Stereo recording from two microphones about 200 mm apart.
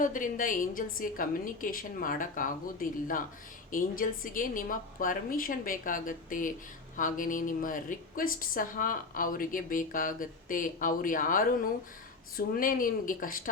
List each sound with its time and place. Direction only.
0.0 s a woman's voice: 40° left (ahead or behind)